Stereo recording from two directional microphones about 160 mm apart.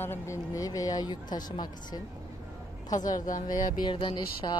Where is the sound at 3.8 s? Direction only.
30° left (ahead or behind).